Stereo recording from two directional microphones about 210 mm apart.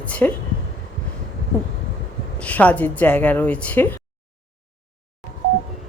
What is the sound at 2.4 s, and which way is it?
A woman's voice, 5° left (ahead or behind).